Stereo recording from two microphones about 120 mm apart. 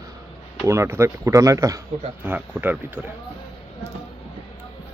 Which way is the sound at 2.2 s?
15° right (ahead or behind).